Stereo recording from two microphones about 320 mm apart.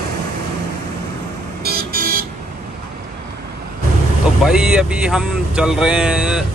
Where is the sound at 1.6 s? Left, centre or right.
Right.